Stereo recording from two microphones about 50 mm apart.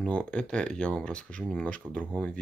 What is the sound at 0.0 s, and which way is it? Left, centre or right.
Speech, left.